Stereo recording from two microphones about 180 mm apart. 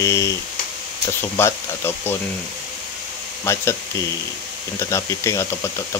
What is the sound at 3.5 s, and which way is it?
Speech, 15° left (ahead or behind).